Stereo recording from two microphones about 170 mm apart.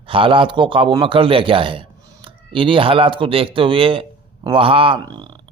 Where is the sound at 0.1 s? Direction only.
30° right (ahead or behind).